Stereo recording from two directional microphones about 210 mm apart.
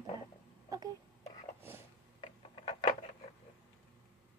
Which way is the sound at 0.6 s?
15° right (ahead or behind).